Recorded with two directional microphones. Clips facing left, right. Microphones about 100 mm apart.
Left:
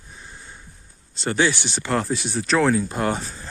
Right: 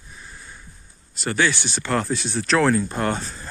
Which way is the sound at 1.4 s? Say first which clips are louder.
Left 1 dB; 20° left (ahead or behind).